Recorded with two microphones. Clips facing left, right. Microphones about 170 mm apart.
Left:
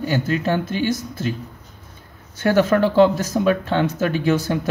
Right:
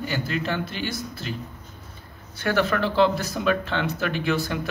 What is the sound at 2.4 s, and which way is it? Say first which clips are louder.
Speech: left 7 dB; 45° left (ahead or behind).